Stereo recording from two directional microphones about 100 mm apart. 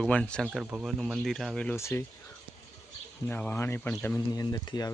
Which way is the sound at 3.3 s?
20° left (ahead or behind).